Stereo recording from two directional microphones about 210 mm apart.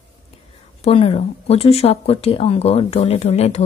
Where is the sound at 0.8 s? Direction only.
25° left (ahead or behind).